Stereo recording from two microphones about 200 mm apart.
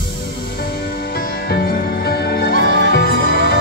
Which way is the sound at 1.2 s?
50° left (ahead or behind).